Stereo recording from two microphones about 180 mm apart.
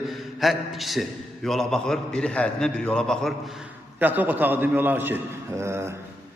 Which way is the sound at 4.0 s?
10° right (ahead or behind).